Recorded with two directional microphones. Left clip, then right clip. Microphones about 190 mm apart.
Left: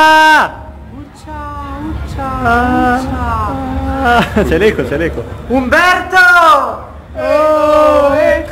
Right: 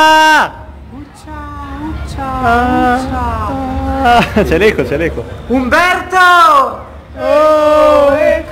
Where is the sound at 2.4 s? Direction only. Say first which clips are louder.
Right 1 dB; centre (ahead or behind).